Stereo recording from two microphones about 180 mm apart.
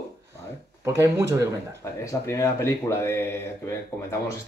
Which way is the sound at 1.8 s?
15° left (ahead or behind).